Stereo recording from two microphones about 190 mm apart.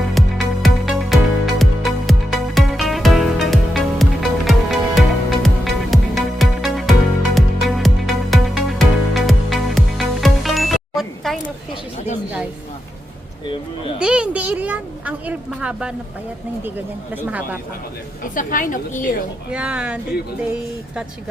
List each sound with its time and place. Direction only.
0.0 s music: centre (ahead or behind)
14.0 s a sound: 5° right (ahead or behind)
17.2 s speech: 10° right (ahead or behind)
18.2 s a woman's voice: 45° left (ahead or behind)
19.5 s speech: 5° right (ahead or behind)